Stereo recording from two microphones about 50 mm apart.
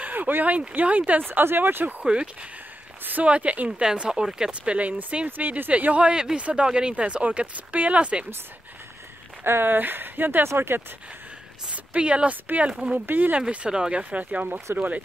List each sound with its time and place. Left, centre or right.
0.0 s speech: right
1.2 s speech: right
3.0 s a sound: right
3.3 s speech: right
3.8 s speech: centre
4.5 s speech: right
9.4 s speech: right
10.4 s speech: right
11.7 s speech: right
13.7 s speech: centre
14.1 s speech: right